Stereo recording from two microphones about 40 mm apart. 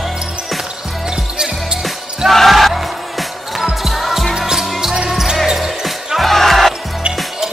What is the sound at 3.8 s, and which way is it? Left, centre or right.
Basketball bounce, centre.